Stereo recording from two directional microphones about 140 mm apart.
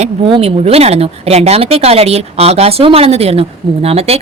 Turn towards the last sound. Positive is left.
turn(degrees=-45)  # may be behind; listen again after turning